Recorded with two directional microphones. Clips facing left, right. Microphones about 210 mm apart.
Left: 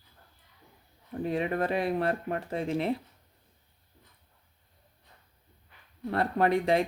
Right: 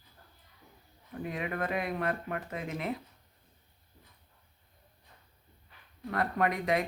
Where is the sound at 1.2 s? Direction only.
30° left (ahead or behind).